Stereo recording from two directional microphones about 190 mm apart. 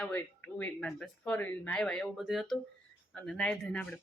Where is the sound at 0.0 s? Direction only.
10° left (ahead or behind).